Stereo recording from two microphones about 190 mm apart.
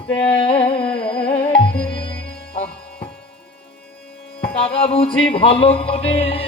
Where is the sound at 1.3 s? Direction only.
30° left (ahead or behind).